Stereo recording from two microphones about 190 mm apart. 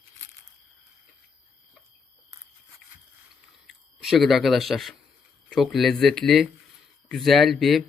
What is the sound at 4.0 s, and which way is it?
A man's voice, centre (ahead or behind).